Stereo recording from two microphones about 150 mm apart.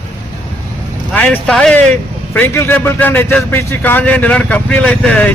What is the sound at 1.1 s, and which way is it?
A man's voice, 10° left (ahead or behind).